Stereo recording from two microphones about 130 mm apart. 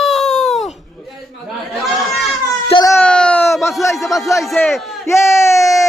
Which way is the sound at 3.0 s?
10° left (ahead or behind).